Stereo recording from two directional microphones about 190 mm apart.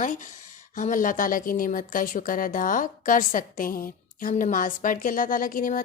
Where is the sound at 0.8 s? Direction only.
45° left (ahead or behind).